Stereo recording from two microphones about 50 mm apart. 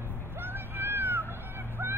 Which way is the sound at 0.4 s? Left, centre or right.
Right.